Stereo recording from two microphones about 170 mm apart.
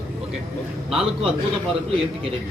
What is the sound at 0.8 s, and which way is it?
Speech, 35° right (ahead or behind).